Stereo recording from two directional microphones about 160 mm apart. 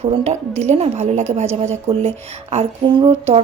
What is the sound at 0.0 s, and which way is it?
A woman's voice, 40° right (ahead or behind).